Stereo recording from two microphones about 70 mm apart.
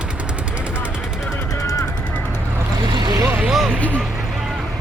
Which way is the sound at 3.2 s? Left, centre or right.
Right.